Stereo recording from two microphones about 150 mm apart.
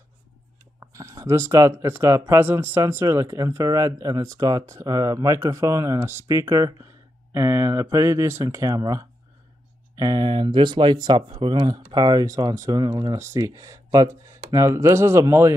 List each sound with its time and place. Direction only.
0.7 s speech: 20° right (ahead or behind)